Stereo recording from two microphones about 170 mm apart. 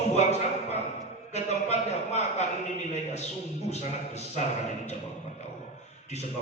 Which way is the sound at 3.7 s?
40° left (ahead or behind).